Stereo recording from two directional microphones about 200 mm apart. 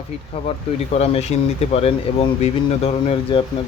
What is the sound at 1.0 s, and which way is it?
Speech, 30° left (ahead or behind).